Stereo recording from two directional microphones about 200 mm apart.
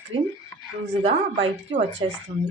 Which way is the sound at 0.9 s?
30° right (ahead or behind).